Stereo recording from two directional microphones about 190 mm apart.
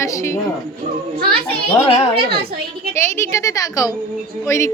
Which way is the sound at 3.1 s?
15° left (ahead or behind).